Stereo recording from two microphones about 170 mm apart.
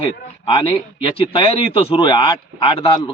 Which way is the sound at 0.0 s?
30° left (ahead or behind).